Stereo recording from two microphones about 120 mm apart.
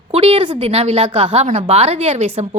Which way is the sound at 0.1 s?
55° right (ahead or behind).